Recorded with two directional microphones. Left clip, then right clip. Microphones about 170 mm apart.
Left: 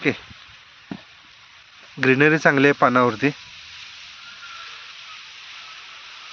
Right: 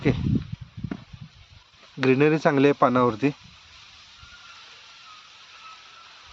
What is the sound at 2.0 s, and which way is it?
Speech, centre (ahead or behind).